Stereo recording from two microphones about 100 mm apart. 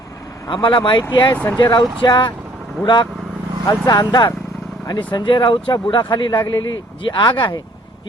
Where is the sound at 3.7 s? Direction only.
40° left (ahead or behind).